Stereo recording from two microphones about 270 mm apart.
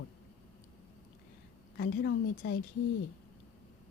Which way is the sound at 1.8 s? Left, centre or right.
Left.